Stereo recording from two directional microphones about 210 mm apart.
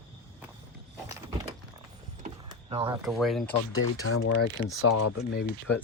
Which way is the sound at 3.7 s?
90° left.